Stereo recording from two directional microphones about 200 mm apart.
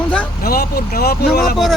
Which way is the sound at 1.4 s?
Centre (ahead or behind).